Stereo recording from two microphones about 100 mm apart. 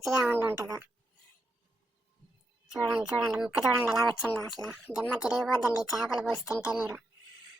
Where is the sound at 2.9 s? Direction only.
15° right (ahead or behind).